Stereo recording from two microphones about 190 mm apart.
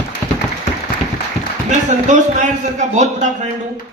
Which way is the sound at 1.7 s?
40° right (ahead or behind).